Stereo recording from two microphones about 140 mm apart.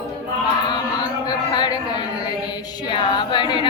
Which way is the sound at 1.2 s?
30° left (ahead or behind).